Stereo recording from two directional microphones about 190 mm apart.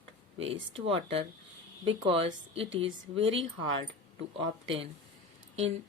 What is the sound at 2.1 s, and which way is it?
Speech, 30° right (ahead or behind).